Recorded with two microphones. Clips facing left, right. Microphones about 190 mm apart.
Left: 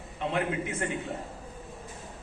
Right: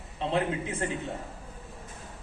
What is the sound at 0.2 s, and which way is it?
Speech, 30° right (ahead or behind).